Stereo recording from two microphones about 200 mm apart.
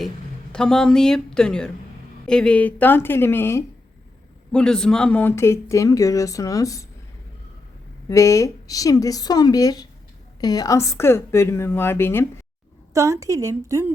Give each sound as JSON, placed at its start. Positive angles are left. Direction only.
{"t": 0.5, "sound": "speech", "side_deg": 5}
{"t": 8.0, "sound": "speech", "side_deg": 15}
{"t": 12.9, "sound": "a woman's voice", "side_deg": -15}